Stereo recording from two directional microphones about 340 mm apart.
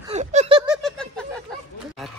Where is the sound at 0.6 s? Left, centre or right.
Centre.